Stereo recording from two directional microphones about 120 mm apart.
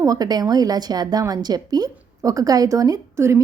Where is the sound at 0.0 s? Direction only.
30° right (ahead or behind).